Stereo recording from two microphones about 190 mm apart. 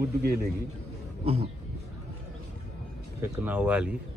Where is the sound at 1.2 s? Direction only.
35° right (ahead or behind).